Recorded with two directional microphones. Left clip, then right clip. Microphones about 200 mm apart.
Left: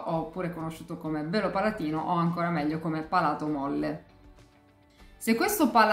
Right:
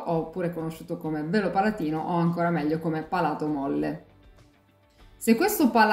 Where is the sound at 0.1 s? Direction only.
15° left (ahead or behind).